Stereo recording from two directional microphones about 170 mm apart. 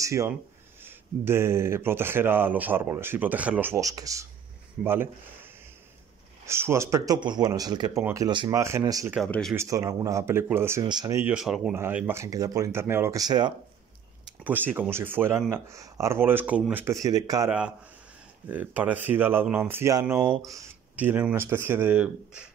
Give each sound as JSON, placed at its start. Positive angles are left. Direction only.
{"t": 0.0, "sound": "speech", "side_deg": -15}
{"t": 9.3, "sound": "speech", "side_deg": 0}
{"t": 9.6, "sound": "speech", "side_deg": -20}
{"t": 14.4, "sound": "speech", "side_deg": -10}
{"t": 17.5, "sound": "speech", "side_deg": -5}